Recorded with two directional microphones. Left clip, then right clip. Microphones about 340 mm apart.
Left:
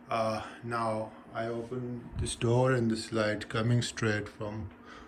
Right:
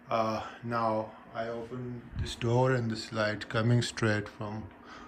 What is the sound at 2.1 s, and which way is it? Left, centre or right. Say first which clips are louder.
Speech: even; centre.